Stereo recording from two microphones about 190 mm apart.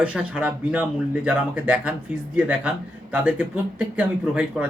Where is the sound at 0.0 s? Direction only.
5° right (ahead or behind).